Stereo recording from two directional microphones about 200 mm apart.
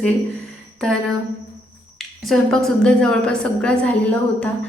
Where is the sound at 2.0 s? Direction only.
Centre (ahead or behind).